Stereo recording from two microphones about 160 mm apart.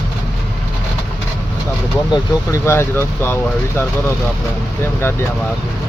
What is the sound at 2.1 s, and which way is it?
Speech, 20° left (ahead or behind).